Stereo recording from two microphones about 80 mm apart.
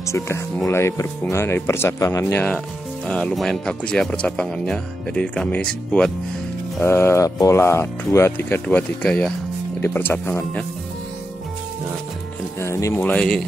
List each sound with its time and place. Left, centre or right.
0.1 s speech: left
3.1 s speech: centre
6.8 s speech: left
7.2 s speech: left
12.5 s music: left
12.9 s speech: left